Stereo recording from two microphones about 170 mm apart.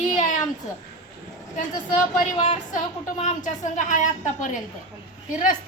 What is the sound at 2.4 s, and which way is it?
Speech, 45° left (ahead or behind).